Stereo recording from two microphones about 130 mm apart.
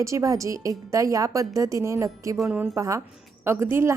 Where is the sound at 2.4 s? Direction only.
10° right (ahead or behind).